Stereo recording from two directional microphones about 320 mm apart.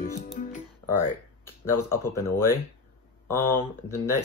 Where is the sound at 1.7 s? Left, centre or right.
Centre.